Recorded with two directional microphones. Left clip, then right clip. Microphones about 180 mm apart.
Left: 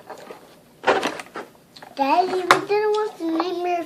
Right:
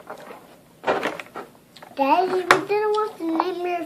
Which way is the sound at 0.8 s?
45° left (ahead or behind).